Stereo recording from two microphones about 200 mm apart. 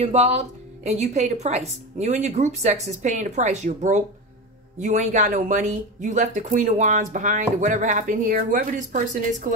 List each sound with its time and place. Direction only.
0.0 s speech: 35° right (ahead or behind)